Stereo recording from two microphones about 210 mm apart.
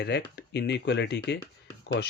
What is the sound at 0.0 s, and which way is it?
Speech, 55° left (ahead or behind).